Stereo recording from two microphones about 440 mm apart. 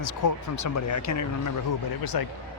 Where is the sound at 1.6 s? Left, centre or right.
Left.